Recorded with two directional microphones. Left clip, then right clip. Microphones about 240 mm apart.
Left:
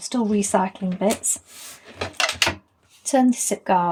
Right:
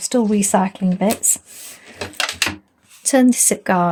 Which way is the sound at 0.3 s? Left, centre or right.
Right.